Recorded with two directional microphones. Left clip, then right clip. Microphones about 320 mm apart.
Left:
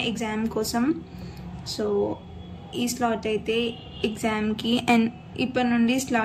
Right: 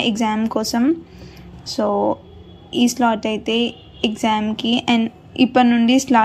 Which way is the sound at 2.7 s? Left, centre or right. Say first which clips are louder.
Right 8 dB; centre.